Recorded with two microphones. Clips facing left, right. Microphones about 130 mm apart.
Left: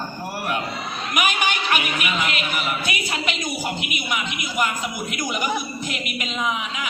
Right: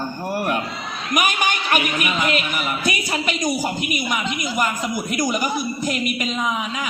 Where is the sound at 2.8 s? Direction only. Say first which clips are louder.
Right 3 dB; 40° right (ahead or behind).